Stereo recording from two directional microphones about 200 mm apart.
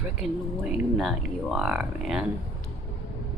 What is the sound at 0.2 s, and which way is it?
Speech, 5° right (ahead or behind).